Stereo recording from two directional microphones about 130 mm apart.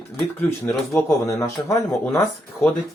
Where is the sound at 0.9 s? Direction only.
25° left (ahead or behind).